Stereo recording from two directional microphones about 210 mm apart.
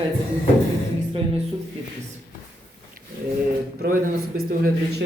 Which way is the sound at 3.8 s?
45° right (ahead or behind).